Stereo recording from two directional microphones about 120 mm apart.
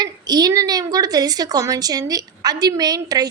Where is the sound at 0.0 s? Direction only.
35° right (ahead or behind).